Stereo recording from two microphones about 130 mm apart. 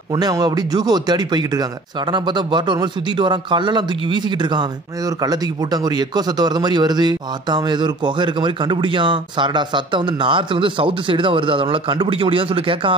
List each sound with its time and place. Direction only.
0.1 s speech: 30° right (ahead or behind)